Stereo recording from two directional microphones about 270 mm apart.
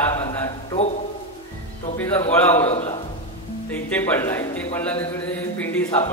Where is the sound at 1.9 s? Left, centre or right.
Centre.